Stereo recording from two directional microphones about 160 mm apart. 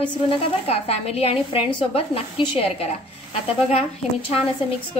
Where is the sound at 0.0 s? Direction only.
35° left (ahead or behind).